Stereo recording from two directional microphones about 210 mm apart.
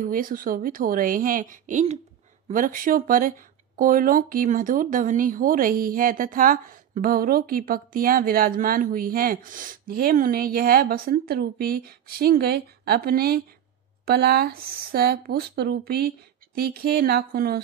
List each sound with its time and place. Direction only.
0.0 s speech: 40° right (ahead or behind)